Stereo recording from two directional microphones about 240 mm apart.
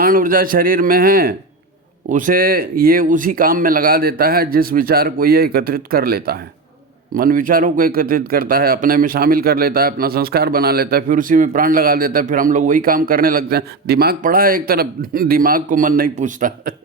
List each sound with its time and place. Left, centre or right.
0.0 s a man's voice: right